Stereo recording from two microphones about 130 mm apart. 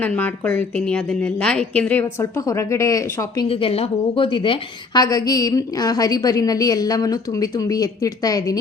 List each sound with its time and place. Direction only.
0.0 s a woman's voice: 15° left (ahead or behind)
2.2 s a woman's voice: 25° left (ahead or behind)
3.5 s a woman's voice: 50° left (ahead or behind)
5.0 s a woman's voice: 30° left (ahead or behind)